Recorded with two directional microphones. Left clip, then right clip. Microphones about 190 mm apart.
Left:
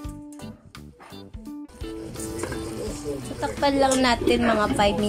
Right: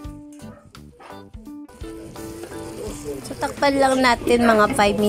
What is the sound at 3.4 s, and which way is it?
A woman's voice, 25° right (ahead or behind).